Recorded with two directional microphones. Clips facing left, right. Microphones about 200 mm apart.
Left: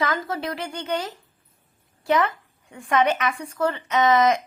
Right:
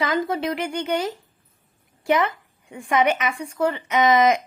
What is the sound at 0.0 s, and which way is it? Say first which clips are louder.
A woman's voice: right 3 dB; 15° right (ahead or behind).